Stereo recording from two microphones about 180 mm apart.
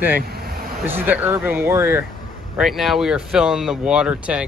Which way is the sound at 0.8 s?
10° right (ahead or behind).